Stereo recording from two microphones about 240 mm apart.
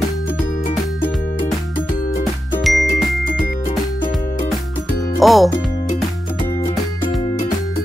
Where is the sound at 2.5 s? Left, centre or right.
Centre.